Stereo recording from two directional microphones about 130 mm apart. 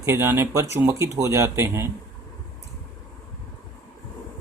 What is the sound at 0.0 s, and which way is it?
Speech, 20° right (ahead or behind).